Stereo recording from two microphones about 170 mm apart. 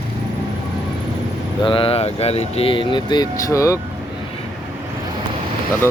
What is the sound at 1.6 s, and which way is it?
Speech, 30° left (ahead or behind).